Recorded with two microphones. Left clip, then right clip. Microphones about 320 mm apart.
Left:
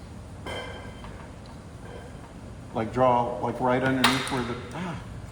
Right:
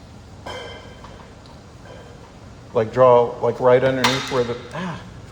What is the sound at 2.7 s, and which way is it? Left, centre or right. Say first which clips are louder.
A man's voice: right 9 dB; right.